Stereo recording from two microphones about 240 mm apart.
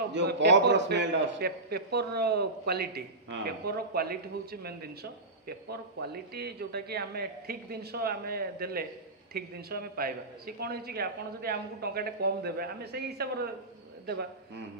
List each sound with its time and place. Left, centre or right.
0.1 s a man's voice: right
6.0 s a man's voice: right